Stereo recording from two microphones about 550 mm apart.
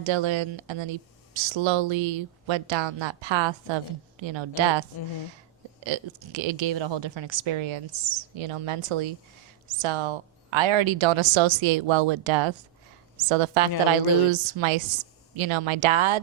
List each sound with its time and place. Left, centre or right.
0.0 s a woman's voice: right
13.2 s a woman's voice: right